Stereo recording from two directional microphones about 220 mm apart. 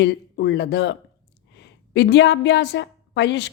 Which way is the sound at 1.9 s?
50° left (ahead or behind).